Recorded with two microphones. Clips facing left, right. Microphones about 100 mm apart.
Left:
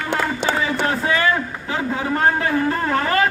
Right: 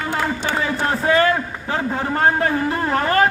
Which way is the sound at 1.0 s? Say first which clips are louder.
Right 3 dB; 40° right (ahead or behind).